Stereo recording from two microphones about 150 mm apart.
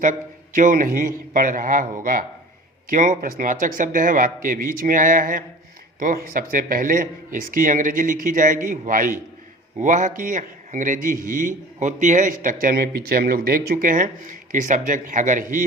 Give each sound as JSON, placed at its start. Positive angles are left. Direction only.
{"t": 0.0, "sound": "a man's voice", "side_deg": -60}
{"t": 2.9, "sound": "a man's voice", "side_deg": -60}